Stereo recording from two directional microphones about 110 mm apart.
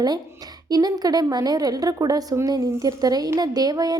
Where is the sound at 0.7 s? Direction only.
35° right (ahead or behind).